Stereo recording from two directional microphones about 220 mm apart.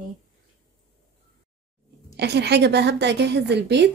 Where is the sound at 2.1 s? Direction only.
50° right (ahead or behind).